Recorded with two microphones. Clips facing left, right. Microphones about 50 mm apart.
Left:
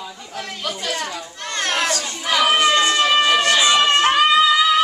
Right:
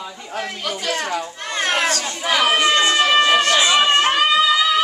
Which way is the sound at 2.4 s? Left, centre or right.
Centre.